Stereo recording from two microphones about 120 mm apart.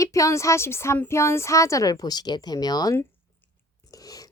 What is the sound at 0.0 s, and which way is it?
Speech, 25° left (ahead or behind).